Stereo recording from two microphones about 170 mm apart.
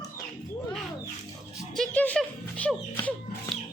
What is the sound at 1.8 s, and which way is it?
Speech, 5° left (ahead or behind).